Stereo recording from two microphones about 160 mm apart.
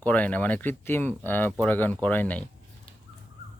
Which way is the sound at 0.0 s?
10° left (ahead or behind).